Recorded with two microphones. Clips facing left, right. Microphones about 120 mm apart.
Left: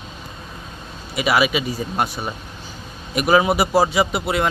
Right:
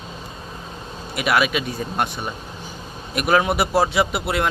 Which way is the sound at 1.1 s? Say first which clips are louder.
Left 2 dB; centre (ahead or behind).